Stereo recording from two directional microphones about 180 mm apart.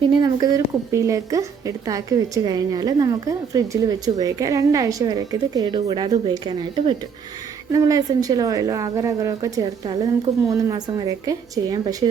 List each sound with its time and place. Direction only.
0.2 s a woman's voice: 20° right (ahead or behind)